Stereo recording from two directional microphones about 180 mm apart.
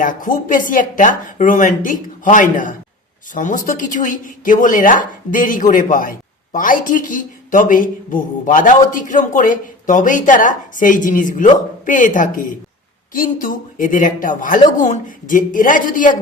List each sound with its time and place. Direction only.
0.0 s speech: 45° left (ahead or behind)